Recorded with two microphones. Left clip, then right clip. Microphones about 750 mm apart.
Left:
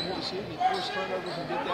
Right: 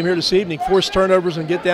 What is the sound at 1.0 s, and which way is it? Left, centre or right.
Speech, right.